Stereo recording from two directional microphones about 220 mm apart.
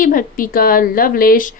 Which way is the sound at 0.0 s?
40° left (ahead or behind).